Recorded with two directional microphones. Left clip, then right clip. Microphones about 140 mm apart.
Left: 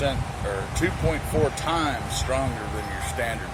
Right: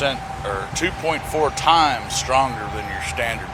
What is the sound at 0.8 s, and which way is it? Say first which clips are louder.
Speech: right 4 dB; 10° left (ahead or behind).